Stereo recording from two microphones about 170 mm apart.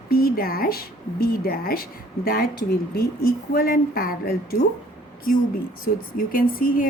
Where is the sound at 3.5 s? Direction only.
60° left (ahead or behind).